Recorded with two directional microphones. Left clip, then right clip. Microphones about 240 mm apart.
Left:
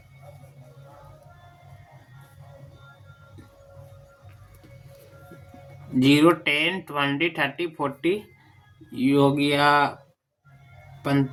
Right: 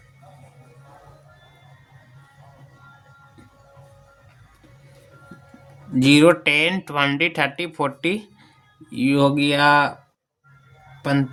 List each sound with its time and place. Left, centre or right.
6.0 s speech: right
11.0 s a man's voice: right